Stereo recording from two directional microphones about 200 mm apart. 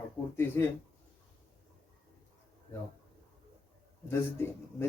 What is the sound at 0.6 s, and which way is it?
Speech, 10° left (ahead or behind).